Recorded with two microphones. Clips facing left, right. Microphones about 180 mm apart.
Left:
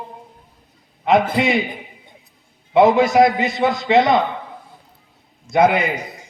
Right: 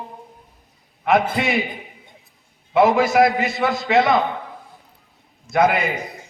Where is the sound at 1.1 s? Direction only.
20° left (ahead or behind).